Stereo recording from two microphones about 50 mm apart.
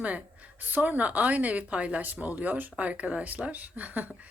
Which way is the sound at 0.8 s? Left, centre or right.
Right.